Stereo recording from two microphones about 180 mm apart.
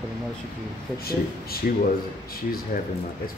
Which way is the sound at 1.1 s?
55° left (ahead or behind).